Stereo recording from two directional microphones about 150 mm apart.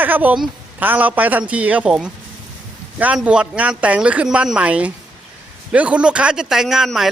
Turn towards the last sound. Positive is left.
turn(degrees=0)  # may be behind; listen again after turning